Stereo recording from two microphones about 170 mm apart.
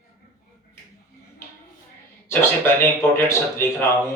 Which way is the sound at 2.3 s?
15° left (ahead or behind).